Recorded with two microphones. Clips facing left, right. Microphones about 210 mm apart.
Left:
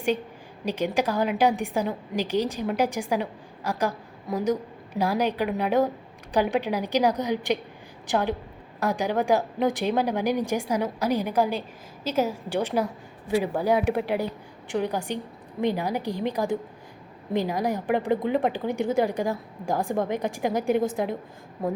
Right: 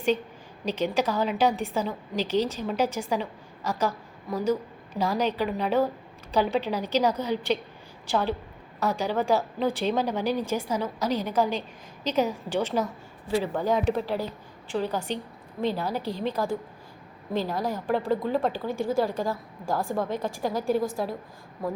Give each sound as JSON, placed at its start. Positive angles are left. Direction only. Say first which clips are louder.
{"t": 0.6, "sound": "a woman's voice", "louder": "left 1 dB", "side_deg": 10}